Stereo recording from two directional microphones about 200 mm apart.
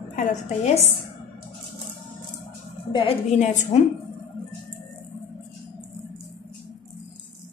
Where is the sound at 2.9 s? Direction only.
30° left (ahead or behind).